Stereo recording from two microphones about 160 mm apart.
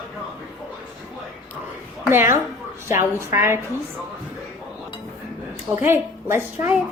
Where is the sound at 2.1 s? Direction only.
15° right (ahead or behind).